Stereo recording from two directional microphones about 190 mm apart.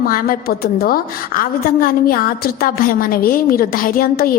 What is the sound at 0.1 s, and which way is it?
A woman's voice, 50° left (ahead or behind).